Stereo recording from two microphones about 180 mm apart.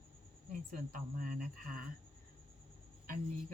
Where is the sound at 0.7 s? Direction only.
50° right (ahead or behind).